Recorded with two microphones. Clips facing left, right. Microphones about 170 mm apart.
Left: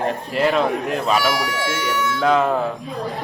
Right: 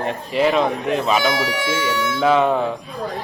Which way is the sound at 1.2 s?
20° right (ahead or behind).